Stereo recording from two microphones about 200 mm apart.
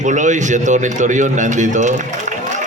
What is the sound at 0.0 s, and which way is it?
A man's voice, 40° right (ahead or behind).